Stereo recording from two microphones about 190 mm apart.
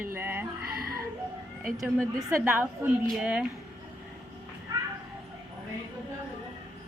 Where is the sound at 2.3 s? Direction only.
10° right (ahead or behind).